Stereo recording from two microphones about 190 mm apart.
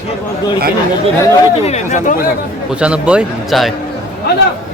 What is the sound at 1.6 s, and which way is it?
Speech, 40° left (ahead or behind).